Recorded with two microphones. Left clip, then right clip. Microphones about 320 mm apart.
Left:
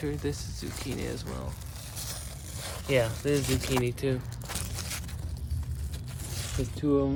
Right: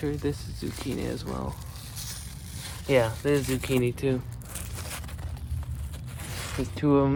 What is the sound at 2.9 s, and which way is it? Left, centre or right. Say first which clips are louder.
Speech: right 3 dB; centre.